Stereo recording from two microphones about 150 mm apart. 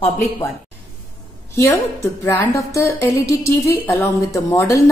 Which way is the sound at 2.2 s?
20° left (ahead or behind).